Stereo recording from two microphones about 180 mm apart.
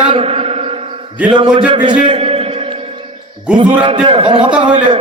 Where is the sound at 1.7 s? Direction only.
25° right (ahead or behind).